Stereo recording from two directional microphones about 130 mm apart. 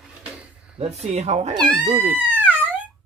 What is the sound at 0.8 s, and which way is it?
Speech, 55° right (ahead or behind).